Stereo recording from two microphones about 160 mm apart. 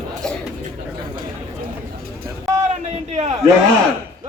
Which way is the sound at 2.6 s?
45° right (ahead or behind).